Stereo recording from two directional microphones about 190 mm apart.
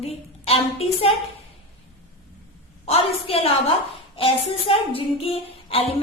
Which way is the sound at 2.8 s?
30° left (ahead or behind).